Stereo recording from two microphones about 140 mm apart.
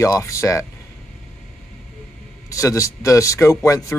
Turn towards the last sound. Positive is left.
turn(degrees=25)  # may be behind; listen again after turning